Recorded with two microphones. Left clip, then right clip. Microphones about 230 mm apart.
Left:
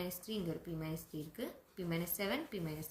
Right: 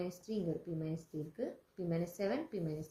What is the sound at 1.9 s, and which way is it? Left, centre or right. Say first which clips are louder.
Speech: right 2 dB; left.